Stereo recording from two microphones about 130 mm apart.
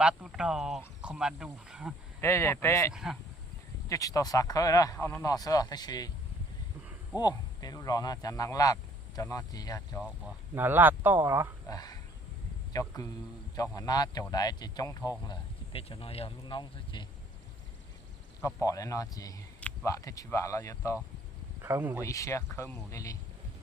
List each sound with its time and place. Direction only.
0.0 s speech: 5° right (ahead or behind)
2.2 s speech: 20° left (ahead or behind)
2.9 s speech: 5° right (ahead or behind)
3.8 s speech: 25° left (ahead or behind)
7.2 s speech: 30° left (ahead or behind)
10.0 s speech: 10° right (ahead or behind)
11.7 s speech: 30° left (ahead or behind)
15.3 s speech: 45° left (ahead or behind)
16.6 s speech: 35° left (ahead or behind)
18.4 s speech: 25° left (ahead or behind)
21.6 s speech: 15° right (ahead or behind)
22.0 s speech: 25° left (ahead or behind)